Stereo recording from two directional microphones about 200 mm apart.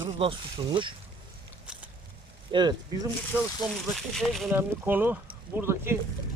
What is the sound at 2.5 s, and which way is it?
Speech, 20° right (ahead or behind).